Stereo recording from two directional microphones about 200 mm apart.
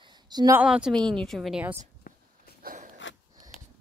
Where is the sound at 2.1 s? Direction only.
45° left (ahead or behind).